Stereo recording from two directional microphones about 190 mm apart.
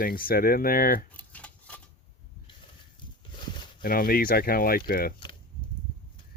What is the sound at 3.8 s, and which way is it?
Speech, 50° left (ahead or behind).